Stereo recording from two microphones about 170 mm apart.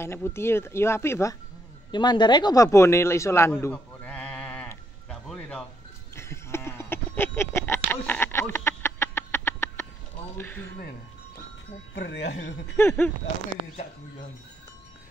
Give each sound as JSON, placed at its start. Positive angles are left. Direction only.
{"t": 0.0, "sound": "speech", "side_deg": 15}
{"t": 1.9, "sound": "speech", "side_deg": 25}
{"t": 3.6, "sound": "sheep", "side_deg": 10}
{"t": 5.3, "sound": "a sound", "side_deg": 5}
{"t": 10.3, "sound": "speech", "side_deg": 10}
{"t": 11.9, "sound": "speech", "side_deg": 90}
{"t": 12.6, "sound": "speech", "side_deg": 15}